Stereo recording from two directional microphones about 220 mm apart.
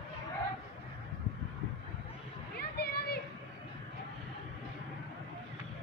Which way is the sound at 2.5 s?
45° left (ahead or behind).